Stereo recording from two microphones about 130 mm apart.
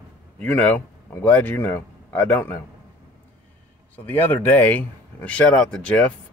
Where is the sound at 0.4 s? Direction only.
10° left (ahead or behind).